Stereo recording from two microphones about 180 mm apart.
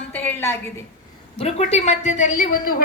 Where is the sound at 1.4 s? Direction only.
35° left (ahead or behind); by 2.8 s 50° left (ahead or behind).